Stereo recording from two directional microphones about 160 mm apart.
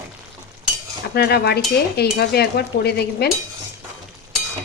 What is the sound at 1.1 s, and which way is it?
Speech, 85° left.